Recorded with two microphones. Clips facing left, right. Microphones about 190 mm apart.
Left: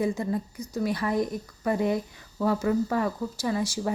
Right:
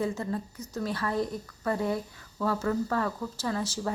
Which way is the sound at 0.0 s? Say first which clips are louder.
Left 4 dB; 15° left (ahead or behind).